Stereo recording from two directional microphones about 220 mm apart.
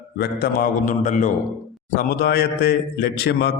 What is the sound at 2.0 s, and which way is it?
A man's voice, 45° left (ahead or behind).